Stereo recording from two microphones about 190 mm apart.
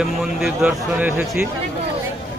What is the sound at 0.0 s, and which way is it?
Speech, centre (ahead or behind).